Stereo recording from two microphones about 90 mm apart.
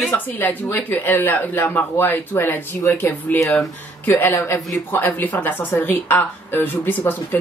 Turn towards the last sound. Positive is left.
turn(degrees=20)  # may be behind; listen again after turning